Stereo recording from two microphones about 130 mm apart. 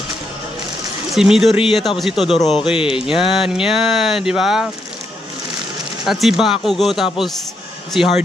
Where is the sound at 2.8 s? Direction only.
45° left (ahead or behind).